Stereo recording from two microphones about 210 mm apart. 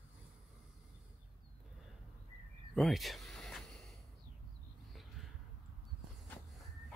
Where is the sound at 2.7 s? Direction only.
Centre (ahead or behind).